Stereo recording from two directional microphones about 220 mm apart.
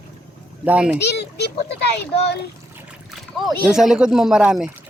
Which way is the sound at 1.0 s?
50° left (ahead or behind).